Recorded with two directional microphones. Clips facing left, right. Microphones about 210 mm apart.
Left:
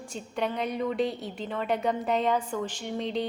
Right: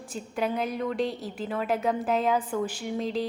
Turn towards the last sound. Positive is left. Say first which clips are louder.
# right 1 dB
turn(degrees=0)  # may be behind; listen again after turning